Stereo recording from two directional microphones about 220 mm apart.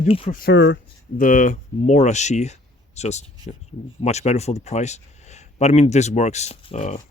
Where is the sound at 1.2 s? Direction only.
35° left (ahead or behind).